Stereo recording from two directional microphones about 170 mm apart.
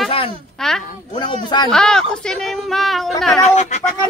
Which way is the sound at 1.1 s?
25° left (ahead or behind).